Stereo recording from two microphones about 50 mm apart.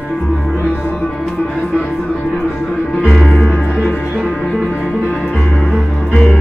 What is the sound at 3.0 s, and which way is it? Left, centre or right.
Music, centre.